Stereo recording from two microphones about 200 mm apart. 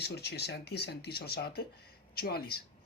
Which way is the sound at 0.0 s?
55° left (ahead or behind).